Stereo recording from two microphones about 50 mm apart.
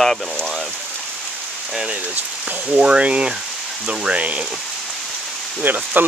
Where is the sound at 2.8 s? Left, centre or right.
Right.